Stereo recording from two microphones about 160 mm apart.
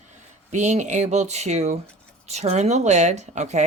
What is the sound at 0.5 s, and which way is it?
A woman's voice, 45° right (ahead or behind).